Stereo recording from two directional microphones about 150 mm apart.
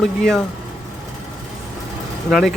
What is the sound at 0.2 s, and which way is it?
Speech, 5° left (ahead or behind).